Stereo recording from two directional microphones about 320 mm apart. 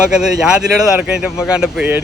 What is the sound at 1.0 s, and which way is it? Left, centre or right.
Speech, centre.